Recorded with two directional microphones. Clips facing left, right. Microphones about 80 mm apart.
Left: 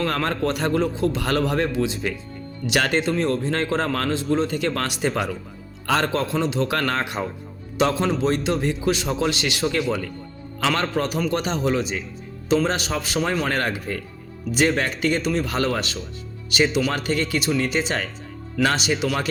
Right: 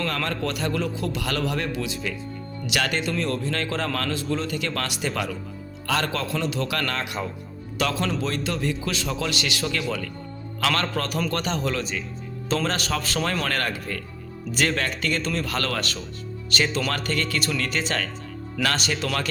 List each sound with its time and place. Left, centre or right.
0.0 s a man's voice: left
10.7 s a man's voice: centre